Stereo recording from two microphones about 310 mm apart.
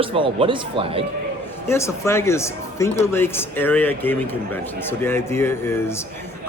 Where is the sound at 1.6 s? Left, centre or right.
Centre.